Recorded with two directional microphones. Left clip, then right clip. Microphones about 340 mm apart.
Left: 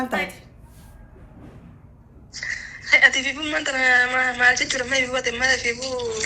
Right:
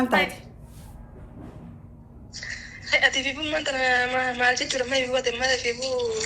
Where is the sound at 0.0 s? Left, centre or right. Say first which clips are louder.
Right 3 dB; centre.